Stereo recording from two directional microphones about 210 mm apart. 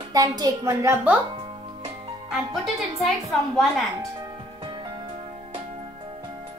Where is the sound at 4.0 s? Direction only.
20° right (ahead or behind).